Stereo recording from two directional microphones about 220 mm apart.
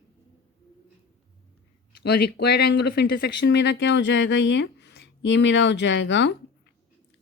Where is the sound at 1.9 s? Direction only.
45° left (ahead or behind).